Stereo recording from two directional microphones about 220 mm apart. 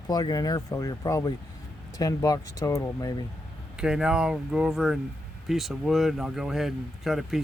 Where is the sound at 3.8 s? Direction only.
5° right (ahead or behind).